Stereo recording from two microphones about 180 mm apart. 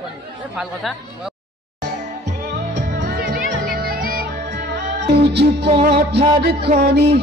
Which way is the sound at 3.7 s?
55° right (ahead or behind).